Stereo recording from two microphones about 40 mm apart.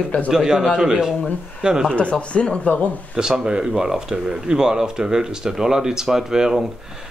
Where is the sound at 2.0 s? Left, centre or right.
Left.